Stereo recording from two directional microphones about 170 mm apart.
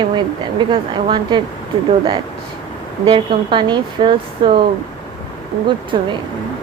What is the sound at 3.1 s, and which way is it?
Speech, 30° right (ahead or behind).